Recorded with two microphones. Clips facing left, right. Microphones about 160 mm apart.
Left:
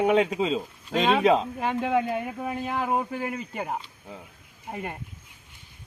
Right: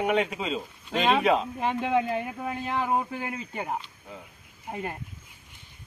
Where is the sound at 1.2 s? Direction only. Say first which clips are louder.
Left 3 dB; 30° left (ahead or behind).